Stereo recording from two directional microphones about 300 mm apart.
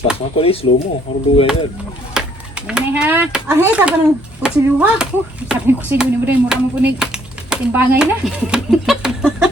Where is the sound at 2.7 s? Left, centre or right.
Centre.